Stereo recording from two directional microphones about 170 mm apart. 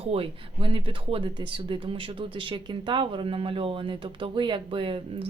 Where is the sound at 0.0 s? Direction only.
35° right (ahead or behind).